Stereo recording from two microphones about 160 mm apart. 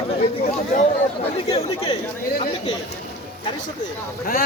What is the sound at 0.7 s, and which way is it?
Speech, 50° left (ahead or behind).